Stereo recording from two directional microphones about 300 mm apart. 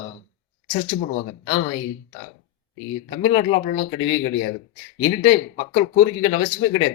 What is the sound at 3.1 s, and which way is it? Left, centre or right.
Speech, centre.